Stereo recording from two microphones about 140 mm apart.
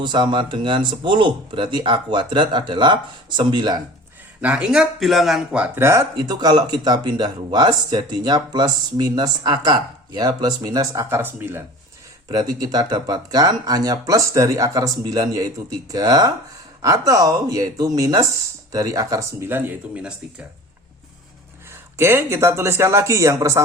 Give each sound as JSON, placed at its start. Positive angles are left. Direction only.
{"t": 0.0, "sound": "speech", "side_deg": -35}
{"t": 4.4, "sound": "speech", "side_deg": -10}
{"t": 5.5, "sound": "speech", "side_deg": -10}
{"t": 12.3, "sound": "speech", "side_deg": -30}
{"t": 21.9, "sound": "speech", "side_deg": -20}